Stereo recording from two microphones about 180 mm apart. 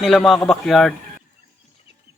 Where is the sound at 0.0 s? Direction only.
Centre (ahead or behind).